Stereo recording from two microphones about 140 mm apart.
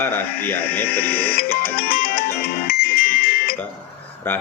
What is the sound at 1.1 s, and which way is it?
Music, 90° left.